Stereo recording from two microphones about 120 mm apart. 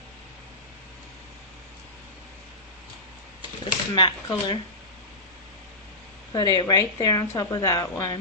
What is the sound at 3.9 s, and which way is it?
Speech, 40° left (ahead or behind).